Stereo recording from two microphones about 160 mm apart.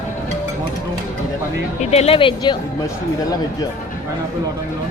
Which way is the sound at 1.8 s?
40° left (ahead or behind).